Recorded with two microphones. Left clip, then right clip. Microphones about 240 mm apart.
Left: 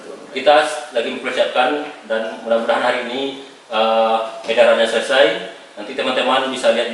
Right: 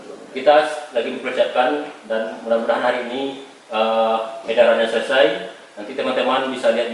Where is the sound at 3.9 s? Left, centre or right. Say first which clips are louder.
Left 3 dB; right.